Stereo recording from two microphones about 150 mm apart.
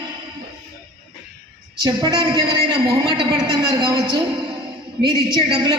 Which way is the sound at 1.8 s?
30° right (ahead or behind).